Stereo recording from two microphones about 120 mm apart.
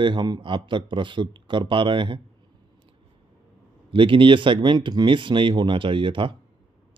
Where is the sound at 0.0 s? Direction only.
40° right (ahead or behind).